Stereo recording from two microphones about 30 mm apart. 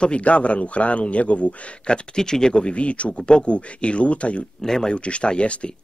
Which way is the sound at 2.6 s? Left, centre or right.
Left.